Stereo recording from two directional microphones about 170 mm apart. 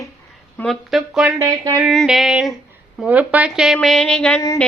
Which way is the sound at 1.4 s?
20° right (ahead or behind).